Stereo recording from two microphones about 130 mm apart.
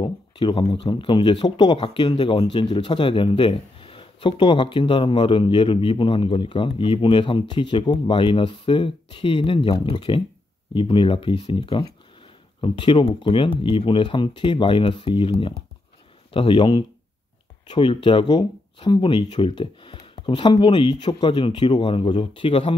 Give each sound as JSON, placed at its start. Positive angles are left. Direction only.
{"t": 0.0, "sound": "speech", "side_deg": 40}